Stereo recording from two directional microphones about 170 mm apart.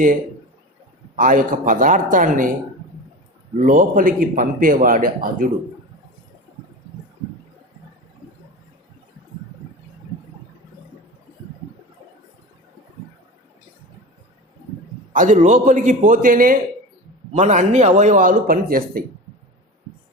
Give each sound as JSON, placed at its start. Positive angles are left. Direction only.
{"t": 1.1, "sound": "a man's voice", "side_deg": -55}
{"t": 3.6, "sound": "a man's voice", "side_deg": -50}
{"t": 15.1, "sound": "a man's voice", "side_deg": -50}
{"t": 17.3, "sound": "a man's voice", "side_deg": -45}